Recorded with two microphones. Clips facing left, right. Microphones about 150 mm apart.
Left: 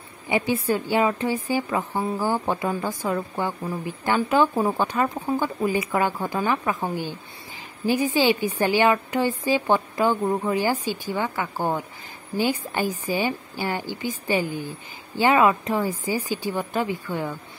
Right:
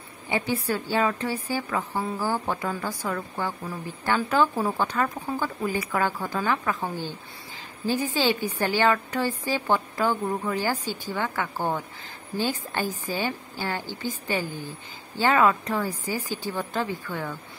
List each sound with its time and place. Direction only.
0.3 s a woman's voice: 15° left (ahead or behind)